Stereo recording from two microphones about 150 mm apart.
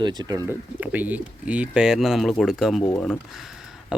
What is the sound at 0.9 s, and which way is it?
Speech, 10° right (ahead or behind).